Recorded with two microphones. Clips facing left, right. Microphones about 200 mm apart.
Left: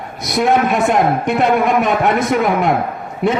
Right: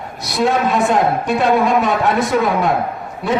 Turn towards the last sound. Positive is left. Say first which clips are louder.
# left 2 dB
turn(degrees=20)  # may be behind; listen again after turning